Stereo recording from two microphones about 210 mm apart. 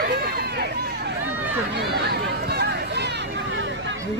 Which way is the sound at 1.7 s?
50° right (ahead or behind).